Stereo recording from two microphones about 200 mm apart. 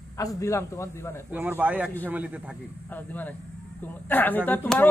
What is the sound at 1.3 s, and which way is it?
A man's voice, 10° right (ahead or behind).